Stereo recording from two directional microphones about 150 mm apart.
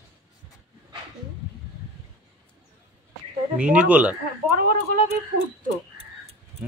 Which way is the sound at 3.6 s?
10° right (ahead or behind).